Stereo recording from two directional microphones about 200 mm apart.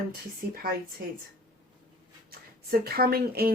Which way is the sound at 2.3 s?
50° right (ahead or behind).